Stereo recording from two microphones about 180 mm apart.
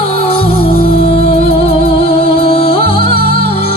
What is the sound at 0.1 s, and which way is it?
Music, 35° left (ahead or behind).